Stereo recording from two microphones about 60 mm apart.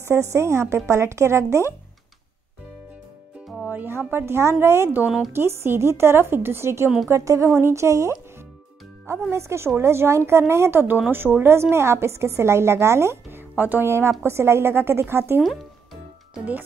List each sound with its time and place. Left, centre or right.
0.0 s a woman's voice: right
3.6 s music: right
4.1 s a woman's voice: right
13.8 s a woman's voice: right
15.4 s music: centre